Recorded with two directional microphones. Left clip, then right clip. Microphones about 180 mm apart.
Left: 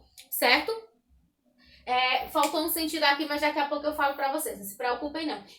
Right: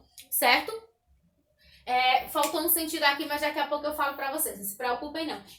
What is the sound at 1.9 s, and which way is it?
A woman's voice, 15° left (ahead or behind).